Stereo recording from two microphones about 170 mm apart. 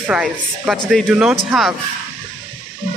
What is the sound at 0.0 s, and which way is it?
Speech, 5° right (ahead or behind).